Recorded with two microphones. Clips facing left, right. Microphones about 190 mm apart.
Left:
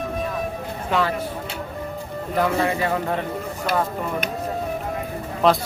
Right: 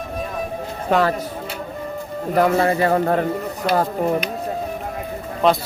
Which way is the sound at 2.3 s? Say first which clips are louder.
Right 5 dB; 45° right (ahead or behind).